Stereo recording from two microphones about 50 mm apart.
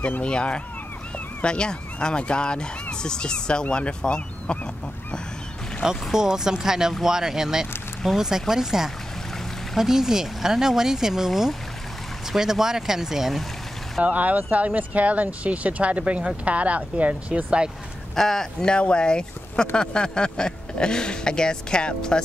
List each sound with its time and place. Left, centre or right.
0.2 s speech: left
5.8 s speech: centre
14.0 s speech: right
18.1 s speech: centre
18.7 s speech: centre